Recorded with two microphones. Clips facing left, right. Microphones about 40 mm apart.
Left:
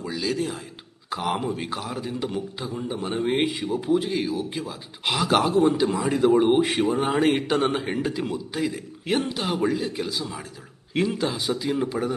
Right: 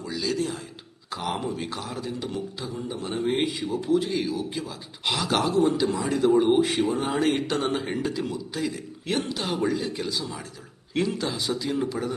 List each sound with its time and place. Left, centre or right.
0.0 s a man's voice: centre